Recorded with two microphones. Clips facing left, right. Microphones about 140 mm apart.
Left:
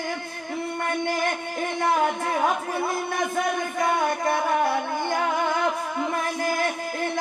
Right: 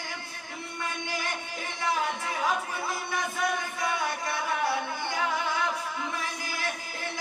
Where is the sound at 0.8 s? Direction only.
55° left (ahead or behind).